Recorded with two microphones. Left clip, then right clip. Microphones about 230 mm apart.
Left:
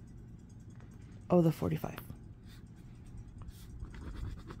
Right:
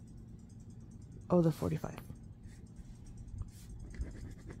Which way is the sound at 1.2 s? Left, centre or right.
Centre.